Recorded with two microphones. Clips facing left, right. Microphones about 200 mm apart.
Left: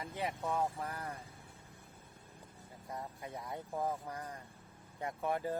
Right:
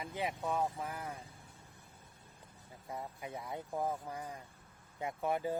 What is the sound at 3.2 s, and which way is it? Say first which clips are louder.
Speech: right 1 dB; 15° right (ahead or behind).